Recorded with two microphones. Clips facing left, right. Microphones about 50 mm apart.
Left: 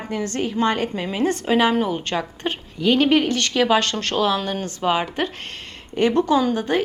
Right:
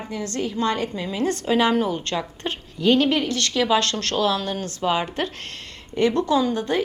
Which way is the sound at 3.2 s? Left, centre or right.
Left.